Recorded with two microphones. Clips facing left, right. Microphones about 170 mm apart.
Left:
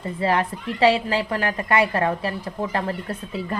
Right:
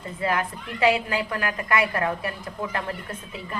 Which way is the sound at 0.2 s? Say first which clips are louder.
Left 4 dB; 30° left (ahead or behind).